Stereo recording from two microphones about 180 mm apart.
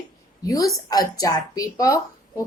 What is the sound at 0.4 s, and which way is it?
A woman's voice, 20° left (ahead or behind).